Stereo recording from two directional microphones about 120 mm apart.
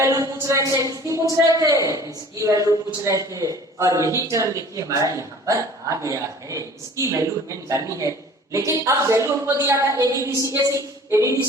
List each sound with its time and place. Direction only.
0.0 s a man's voice: 25° right (ahead or behind)